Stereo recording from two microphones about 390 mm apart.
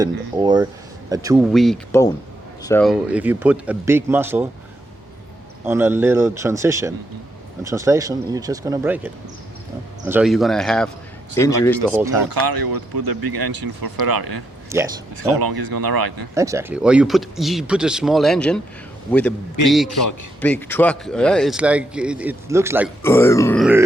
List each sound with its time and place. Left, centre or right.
0.0 s a man's voice: centre
5.6 s a man's voice: centre
11.3 s grunt: centre
11.9 s speech: centre
12.3 s speech: right
14.7 s speech: centre
15.1 s speech: right
16.3 s a man's voice: centre
19.6 s a man's voice: centre
23.0 s grunt: centre